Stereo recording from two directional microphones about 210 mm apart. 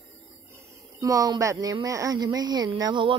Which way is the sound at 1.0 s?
15° right (ahead or behind).